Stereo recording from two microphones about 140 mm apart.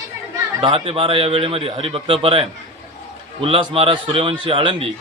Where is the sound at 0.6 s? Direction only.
40° right (ahead or behind).